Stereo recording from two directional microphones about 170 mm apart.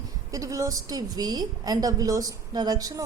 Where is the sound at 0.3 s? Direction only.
20° right (ahead or behind).